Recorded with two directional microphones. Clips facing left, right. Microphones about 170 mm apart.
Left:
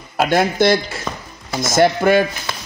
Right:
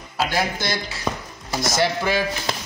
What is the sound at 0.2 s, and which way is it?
Speech, 55° left (ahead or behind).